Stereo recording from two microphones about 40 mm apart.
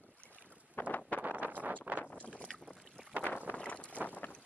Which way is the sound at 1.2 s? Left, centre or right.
Right.